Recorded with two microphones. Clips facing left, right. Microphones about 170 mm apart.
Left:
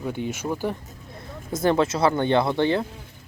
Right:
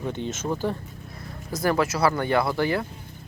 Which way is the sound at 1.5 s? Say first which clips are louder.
Left 2 dB; 25° left (ahead or behind).